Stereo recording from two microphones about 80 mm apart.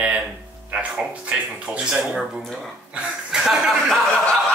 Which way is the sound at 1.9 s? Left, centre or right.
Centre.